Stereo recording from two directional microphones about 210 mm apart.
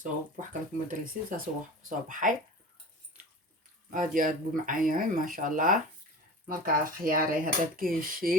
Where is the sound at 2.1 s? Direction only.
40° right (ahead or behind).